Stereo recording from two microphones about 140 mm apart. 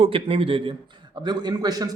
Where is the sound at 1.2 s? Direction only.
30° right (ahead or behind).